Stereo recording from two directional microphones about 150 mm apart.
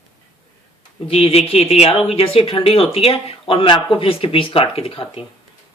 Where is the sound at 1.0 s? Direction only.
40° left (ahead or behind).